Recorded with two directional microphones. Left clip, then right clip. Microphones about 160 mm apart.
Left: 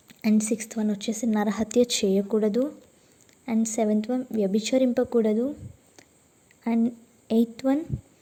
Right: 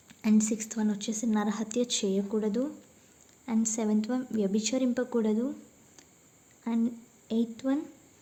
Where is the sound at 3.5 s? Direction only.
25° left (ahead or behind).